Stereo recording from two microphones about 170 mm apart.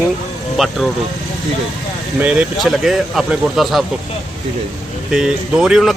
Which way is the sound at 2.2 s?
5° right (ahead or behind).